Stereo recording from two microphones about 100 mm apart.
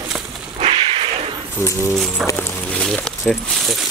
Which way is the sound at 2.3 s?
25° left (ahead or behind).